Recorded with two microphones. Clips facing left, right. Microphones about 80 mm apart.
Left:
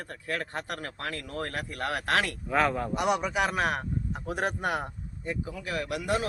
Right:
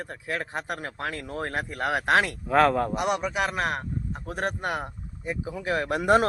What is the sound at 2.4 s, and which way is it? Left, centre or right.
Speech, right.